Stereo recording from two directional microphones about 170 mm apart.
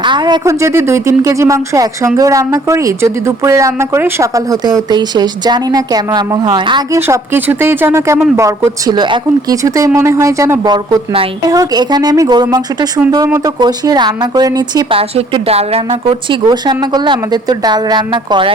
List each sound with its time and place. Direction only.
0.0 s a woman's voice: 25° right (ahead or behind)